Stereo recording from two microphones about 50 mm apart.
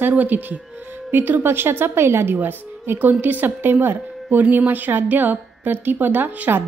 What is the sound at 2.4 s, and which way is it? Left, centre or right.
A woman's voice, right.